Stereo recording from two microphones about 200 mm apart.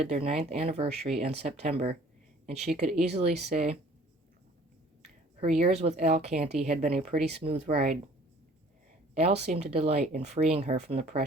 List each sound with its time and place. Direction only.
0.0 s speech: 30° right (ahead or behind)
5.4 s speech: 30° right (ahead or behind)
9.1 s speech: 35° right (ahead or behind)